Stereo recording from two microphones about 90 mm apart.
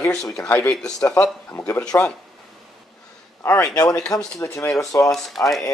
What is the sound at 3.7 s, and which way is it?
Speech, 45° left (ahead or behind).